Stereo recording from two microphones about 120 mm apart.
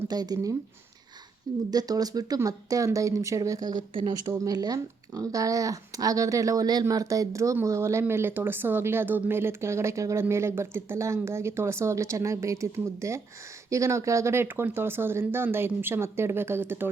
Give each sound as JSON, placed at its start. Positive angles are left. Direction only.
{"t": 0.1, "sound": "speech", "side_deg": -35}
{"t": 1.7, "sound": "speech", "side_deg": -30}